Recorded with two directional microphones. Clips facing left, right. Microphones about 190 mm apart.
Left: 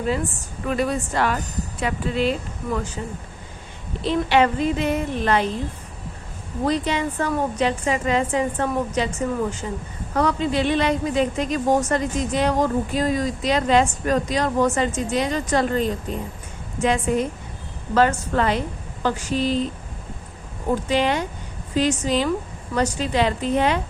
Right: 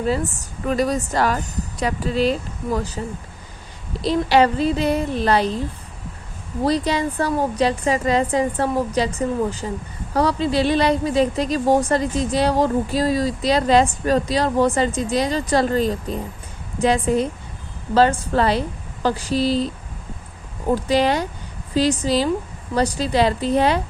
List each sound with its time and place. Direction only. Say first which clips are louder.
0.1 s a woman's voice: right 2 dB; 40° right (ahead or behind)
4.0 s a woman's voice: right 2 dB; 35° right (ahead or behind)
6.7 s a woman's voice: right 2 dB; 35° right (ahead or behind)
20.8 s a woman's voice: right 3 dB; 35° right (ahead or behind)